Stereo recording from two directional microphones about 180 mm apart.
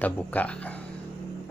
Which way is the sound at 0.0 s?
10° left (ahead or behind).